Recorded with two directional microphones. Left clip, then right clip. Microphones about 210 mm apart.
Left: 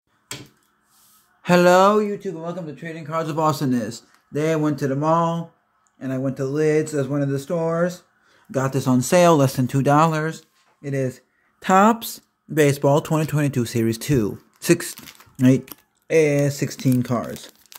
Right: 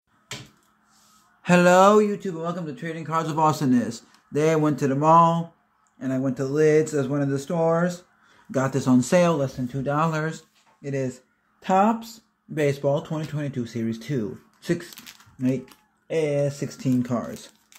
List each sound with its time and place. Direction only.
1.4 s speech: 15° left (ahead or behind)
1.9 s a man's voice: 5° right (ahead or behind); by 9.3 s 15° left (ahead or behind)
9.3 s speech: 40° left (ahead or behind)
9.9 s speech: 20° left (ahead or behind)
11.6 s speech: 40° left (ahead or behind); by 17.5 s 20° left (ahead or behind)